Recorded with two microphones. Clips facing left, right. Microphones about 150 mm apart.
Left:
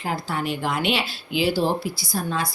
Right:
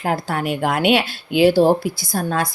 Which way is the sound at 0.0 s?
60° right (ahead or behind).